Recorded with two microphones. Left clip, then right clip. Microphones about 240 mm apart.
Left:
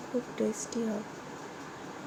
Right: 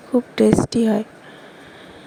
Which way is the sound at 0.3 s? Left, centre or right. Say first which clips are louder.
Right 17 dB; right.